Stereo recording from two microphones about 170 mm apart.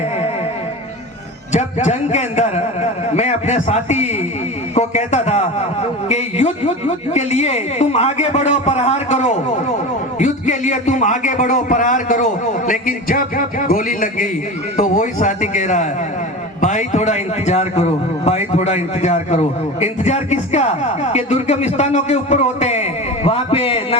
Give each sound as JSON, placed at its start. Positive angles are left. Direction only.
{"t": 1.5, "sound": "a man's voice", "side_deg": 40}